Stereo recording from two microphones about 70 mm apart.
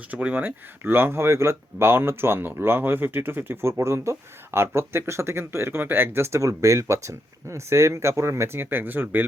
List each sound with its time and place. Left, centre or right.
0.1 s speech: centre